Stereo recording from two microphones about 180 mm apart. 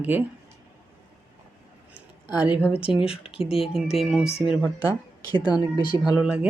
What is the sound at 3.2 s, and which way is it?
Speech, 30° left (ahead or behind).